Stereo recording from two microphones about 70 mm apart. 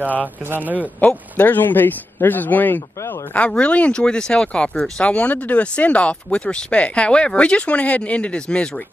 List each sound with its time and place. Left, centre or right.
0.5 s speech: right
1.0 s speech: left